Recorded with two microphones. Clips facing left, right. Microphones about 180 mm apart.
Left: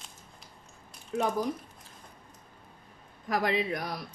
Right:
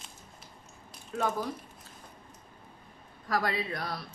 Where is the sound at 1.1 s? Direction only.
20° left (ahead or behind).